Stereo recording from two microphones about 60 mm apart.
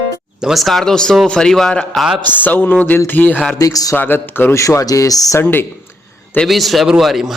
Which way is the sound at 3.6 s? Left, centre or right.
Left.